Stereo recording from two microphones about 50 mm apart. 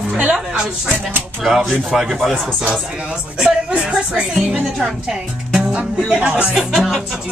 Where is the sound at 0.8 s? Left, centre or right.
Right.